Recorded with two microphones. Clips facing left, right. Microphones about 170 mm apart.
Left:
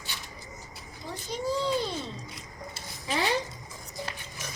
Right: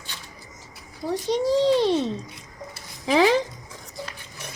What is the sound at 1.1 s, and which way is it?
A child's voice, 85° right.